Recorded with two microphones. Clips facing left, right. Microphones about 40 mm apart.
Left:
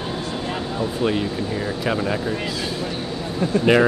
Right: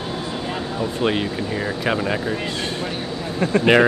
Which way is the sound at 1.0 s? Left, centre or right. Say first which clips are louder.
Right 1 dB; right.